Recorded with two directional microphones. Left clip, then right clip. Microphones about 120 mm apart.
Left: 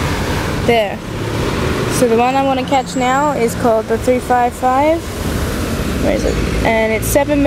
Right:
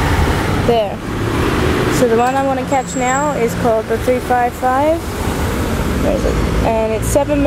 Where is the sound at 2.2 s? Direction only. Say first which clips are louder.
Left 1 dB; 20° left (ahead or behind).